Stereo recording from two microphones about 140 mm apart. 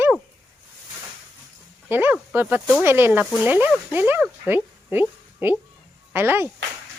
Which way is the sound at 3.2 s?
5° right (ahead or behind).